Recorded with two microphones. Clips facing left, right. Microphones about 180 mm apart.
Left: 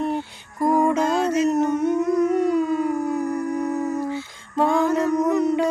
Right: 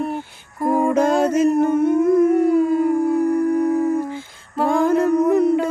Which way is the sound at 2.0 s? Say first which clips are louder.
Right 5 dB; 50° right (ahead or behind).